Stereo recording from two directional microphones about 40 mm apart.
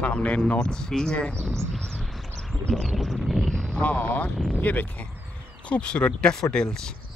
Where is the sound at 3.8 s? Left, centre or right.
Left.